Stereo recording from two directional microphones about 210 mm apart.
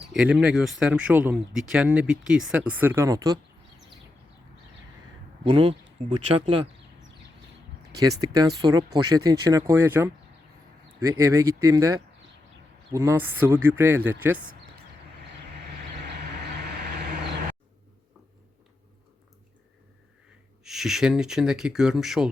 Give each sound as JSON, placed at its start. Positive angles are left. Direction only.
{"t": 0.1, "sound": "speech", "side_deg": -5}
{"t": 5.5, "sound": "speech", "side_deg": -25}
{"t": 7.9, "sound": "speech", "side_deg": -15}
{"t": 16.0, "sound": "vehicle", "side_deg": -50}
{"t": 20.7, "sound": "speech", "side_deg": 0}